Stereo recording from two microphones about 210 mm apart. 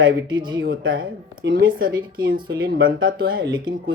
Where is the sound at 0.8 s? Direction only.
65° right (ahead or behind).